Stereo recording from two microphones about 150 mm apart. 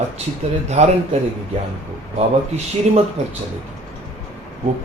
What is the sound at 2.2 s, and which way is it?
Speech, 45° right (ahead or behind).